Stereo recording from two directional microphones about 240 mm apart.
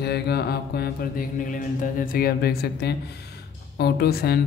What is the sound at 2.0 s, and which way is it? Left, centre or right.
Speech, left.